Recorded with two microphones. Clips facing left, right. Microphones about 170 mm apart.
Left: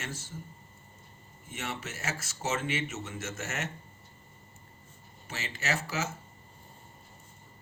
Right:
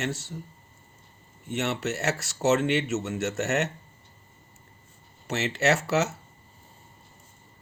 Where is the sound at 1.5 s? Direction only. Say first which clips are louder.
Right 10 dB; 70° right (ahead or behind).